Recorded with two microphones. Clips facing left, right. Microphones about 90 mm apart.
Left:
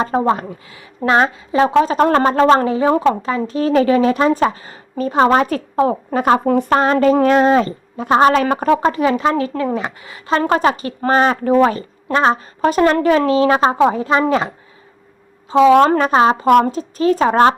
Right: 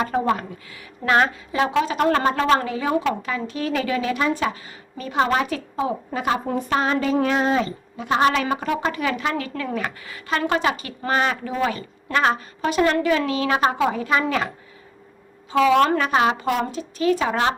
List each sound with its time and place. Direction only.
0.0 s a woman's voice: 30° left (ahead or behind)
6.4 s a woman's voice: 80° left
6.7 s a woman's voice: 50° left (ahead or behind)